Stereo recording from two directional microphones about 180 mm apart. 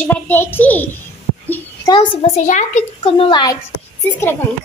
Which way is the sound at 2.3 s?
40° left (ahead or behind).